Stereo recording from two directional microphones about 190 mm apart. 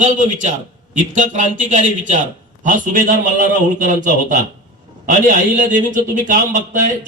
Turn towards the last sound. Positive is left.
turn(degrees=-45)  # may be behind; listen again after turning